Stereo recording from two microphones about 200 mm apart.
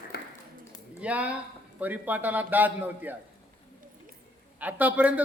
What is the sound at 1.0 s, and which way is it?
A man's voice, 5° right (ahead or behind).